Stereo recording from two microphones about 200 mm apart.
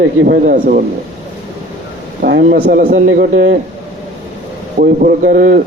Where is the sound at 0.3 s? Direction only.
45° right (ahead or behind).